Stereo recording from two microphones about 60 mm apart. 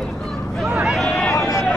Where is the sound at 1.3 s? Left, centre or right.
Left.